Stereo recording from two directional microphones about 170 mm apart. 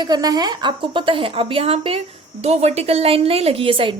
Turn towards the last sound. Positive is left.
turn(degrees=-30)  # may be behind; listen again after turning